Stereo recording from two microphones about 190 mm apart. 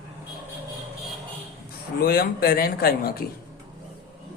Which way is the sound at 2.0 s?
55° left (ahead or behind).